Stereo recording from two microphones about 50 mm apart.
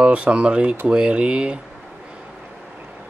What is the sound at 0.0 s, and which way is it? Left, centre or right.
Speech, right.